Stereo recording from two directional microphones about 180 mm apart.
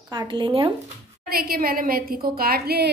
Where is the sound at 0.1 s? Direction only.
25° right (ahead or behind).